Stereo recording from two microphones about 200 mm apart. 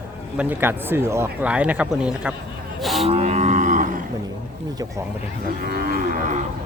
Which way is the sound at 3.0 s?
30° right (ahead or behind).